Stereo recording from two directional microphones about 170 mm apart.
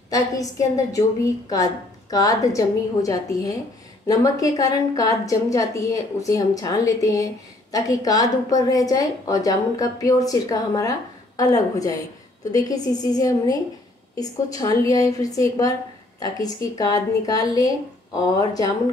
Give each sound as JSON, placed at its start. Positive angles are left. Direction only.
{"t": 0.1, "sound": "a woman's voice", "side_deg": 20}
{"t": 14.6, "sound": "a woman's voice", "side_deg": 20}